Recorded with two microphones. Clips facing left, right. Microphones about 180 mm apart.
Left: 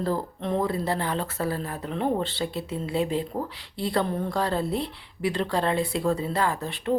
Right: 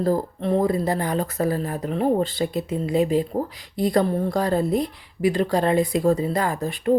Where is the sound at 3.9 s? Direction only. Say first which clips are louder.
Right 4 dB; 35° right (ahead or behind).